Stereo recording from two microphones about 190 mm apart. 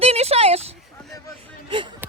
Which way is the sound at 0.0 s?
30° right (ahead or behind).